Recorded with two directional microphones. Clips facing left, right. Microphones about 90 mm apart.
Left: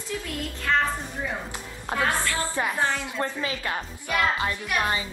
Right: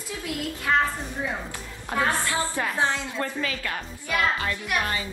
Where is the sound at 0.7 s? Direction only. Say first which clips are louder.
Right 1 dB; 10° right (ahead or behind).